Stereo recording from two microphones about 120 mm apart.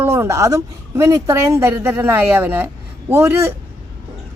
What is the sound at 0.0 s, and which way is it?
A woman's voice, 20° right (ahead or behind).